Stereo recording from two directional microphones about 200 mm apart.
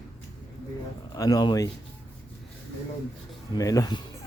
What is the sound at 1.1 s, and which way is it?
Speech, 15° left (ahead or behind).